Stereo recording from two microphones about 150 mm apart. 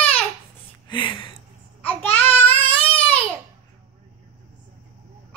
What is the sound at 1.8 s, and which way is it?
Babbling, 10° left (ahead or behind).